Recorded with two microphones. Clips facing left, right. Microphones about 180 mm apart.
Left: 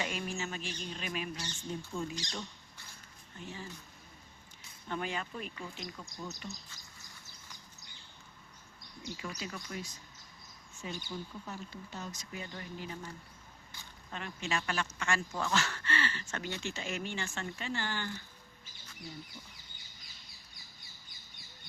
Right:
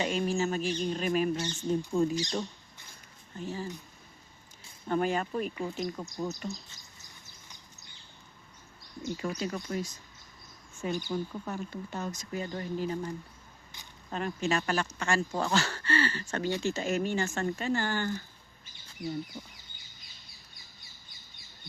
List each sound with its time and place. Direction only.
0.0 s speech: 30° right (ahead or behind)
3.4 s speech: 40° right (ahead or behind)
4.9 s speech: 45° right (ahead or behind)
9.0 s speech: 50° right (ahead or behind)
10.8 s speech: 55° right (ahead or behind); by 13.1 s 40° right (ahead or behind)
14.1 s speech: 40° right (ahead or behind)